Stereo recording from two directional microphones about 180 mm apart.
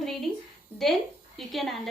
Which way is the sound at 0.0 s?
Centre (ahead or behind).